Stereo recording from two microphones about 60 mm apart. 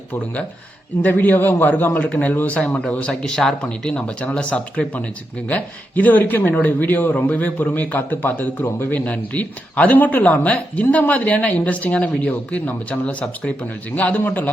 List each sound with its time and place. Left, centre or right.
1.0 s a man's voice: left
3.1 s speech: centre
3.6 s a man's voice: centre; by 8.9 s left
8.9 s speech: left